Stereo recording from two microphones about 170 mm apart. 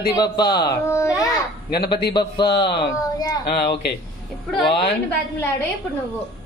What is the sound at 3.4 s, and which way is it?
Speech, 70° left (ahead or behind).